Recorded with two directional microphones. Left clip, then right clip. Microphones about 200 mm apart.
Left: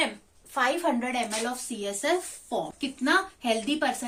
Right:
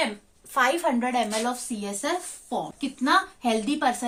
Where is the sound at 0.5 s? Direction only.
40° right (ahead or behind).